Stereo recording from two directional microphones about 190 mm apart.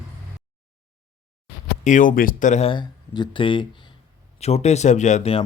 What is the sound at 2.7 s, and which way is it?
Speech, 25° left (ahead or behind).